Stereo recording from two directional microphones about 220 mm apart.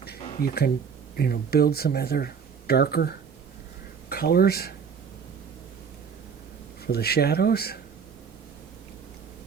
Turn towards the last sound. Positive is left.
turn(degrees=45)  # may be behind; listen again after turning